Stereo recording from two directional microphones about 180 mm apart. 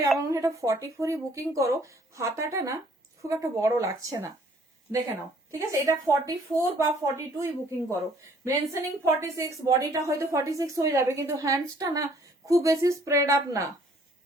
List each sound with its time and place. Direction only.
0.3 s a woman's voice: 15° right (ahead or behind)
5.5 s a woman's voice: 15° right (ahead or behind)